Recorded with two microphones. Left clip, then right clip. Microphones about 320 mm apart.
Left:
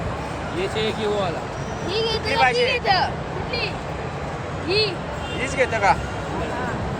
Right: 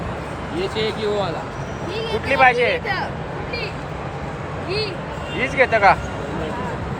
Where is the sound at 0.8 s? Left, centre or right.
Centre.